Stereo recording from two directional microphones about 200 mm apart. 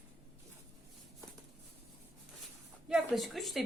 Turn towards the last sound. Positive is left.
turn(degrees=0)  # may be behind; listen again after turning